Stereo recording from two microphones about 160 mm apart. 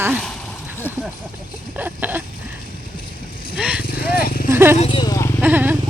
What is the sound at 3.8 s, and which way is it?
Vehicle, 70° left (ahead or behind).